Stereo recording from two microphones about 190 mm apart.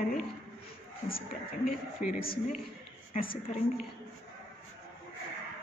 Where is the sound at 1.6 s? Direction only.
50° left (ahead or behind).